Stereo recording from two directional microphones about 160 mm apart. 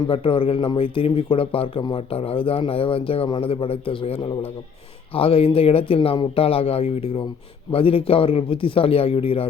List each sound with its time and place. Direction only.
0.1 s speech: 35° left (ahead or behind)